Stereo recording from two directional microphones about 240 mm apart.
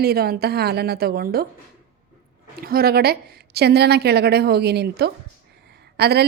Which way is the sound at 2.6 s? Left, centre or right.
Right.